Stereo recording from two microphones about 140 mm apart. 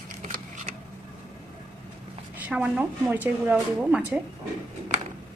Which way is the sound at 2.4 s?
10° right (ahead or behind).